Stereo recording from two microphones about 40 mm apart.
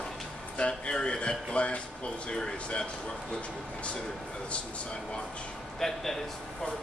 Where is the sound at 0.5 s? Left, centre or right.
Left.